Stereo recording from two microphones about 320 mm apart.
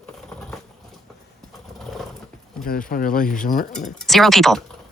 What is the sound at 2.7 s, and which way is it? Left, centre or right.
Speech, left.